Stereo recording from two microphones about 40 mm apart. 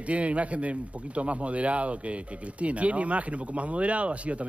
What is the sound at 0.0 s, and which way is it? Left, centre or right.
Speech, right.